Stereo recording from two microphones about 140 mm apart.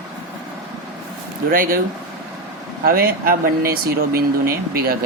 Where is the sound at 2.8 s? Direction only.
90° right.